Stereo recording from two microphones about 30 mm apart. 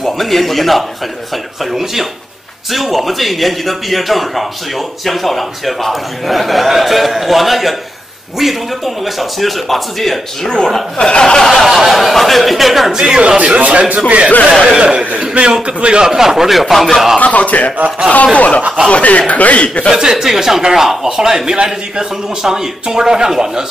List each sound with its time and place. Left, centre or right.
0.0 s a man's voice: centre
11.0 s speech: left
11.4 s speech: centre
12.9 s speech: right
13.4 s speech: right
14.5 s speech: left
15.6 s a man's voice: right
16.1 s speech: centre
17.2 s a man's voice: left
19.6 s speech: left
19.9 s speech: centre